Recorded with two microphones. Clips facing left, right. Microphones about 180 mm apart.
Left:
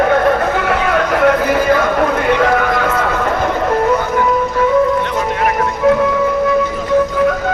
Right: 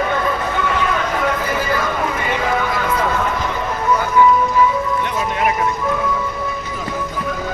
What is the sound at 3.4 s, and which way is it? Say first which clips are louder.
Vehicle: left 7 dB; 55° left (ahead or behind).